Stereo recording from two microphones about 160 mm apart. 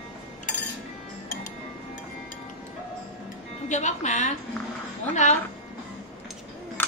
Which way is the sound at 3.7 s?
45° left (ahead or behind).